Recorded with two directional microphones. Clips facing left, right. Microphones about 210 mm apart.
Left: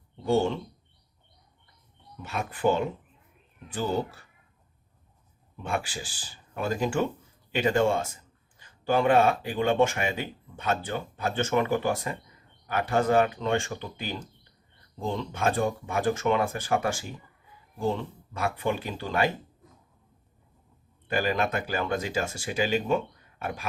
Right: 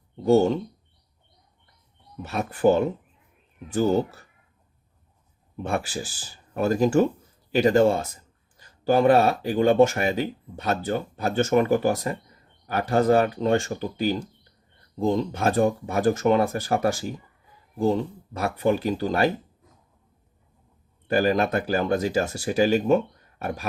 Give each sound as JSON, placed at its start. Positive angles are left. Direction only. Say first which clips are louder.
{"t": 0.2, "sound": "speech", "louder": "right 6 dB", "side_deg": -40}
{"t": 2.2, "sound": "a man's voice", "louder": "right 5 dB", "side_deg": -40}
{"t": 5.6, "sound": "a man's voice", "louder": "right 4 dB", "side_deg": -40}
{"t": 21.1, "sound": "a man's voice", "louder": "right 6 dB", "side_deg": -40}